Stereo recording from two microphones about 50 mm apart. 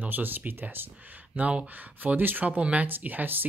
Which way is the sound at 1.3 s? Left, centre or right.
Right.